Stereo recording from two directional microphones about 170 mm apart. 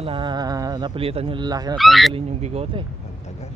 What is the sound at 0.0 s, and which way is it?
Speech, 30° right (ahead or behind).